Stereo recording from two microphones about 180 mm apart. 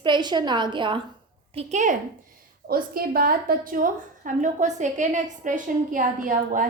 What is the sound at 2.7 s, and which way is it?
A woman's voice, 55° right (ahead or behind).